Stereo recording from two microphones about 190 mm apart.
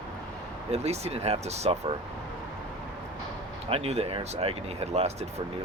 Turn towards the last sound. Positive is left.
turn(degrees=-35)  # may be behind; listen again after turning